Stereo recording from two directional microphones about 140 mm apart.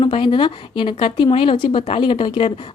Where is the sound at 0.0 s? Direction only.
35° left (ahead or behind).